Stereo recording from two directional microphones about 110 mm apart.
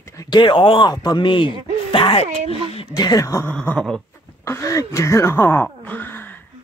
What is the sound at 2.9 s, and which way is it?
Speech, 35° left (ahead or behind).